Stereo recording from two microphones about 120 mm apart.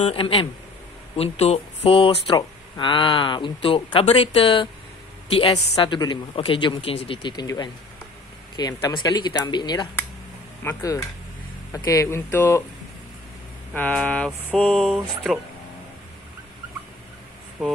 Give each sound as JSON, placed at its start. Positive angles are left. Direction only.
{"t": 0.0, "sound": "speech", "side_deg": 50}
{"t": 2.3, "sound": "speech", "side_deg": 40}
{"t": 13.7, "sound": "mantra", "side_deg": 10}